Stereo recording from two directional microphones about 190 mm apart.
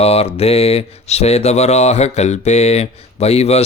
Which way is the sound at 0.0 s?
30° left (ahead or behind).